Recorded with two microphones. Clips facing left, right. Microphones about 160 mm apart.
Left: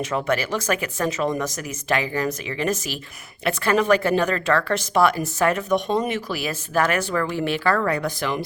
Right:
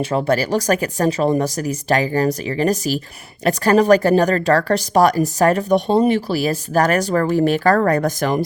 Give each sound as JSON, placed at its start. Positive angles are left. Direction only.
{"t": 0.0, "sound": "speech", "side_deg": -30}